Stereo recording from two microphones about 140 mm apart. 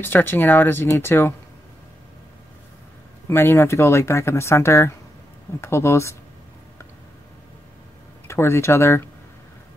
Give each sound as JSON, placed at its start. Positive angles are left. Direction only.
{"t": 0.0, "sound": "speech", "side_deg": 15}
{"t": 3.3, "sound": "speech", "side_deg": 15}
{"t": 8.3, "sound": "speech", "side_deg": 20}